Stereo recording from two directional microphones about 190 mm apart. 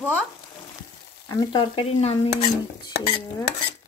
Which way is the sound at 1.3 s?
25° left (ahead or behind).